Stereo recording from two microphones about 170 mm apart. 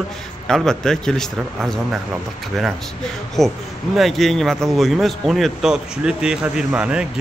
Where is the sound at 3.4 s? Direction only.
Centre (ahead or behind).